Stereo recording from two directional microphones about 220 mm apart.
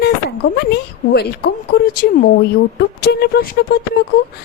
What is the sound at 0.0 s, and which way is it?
A woman's voice, 45° left (ahead or behind).